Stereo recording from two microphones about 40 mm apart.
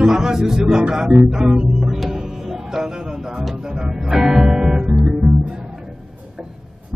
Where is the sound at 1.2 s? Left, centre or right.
Centre.